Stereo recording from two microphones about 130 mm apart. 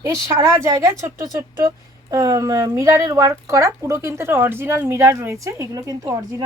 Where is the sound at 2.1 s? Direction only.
25° right (ahead or behind).